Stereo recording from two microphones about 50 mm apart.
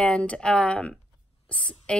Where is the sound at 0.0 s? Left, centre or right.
Left.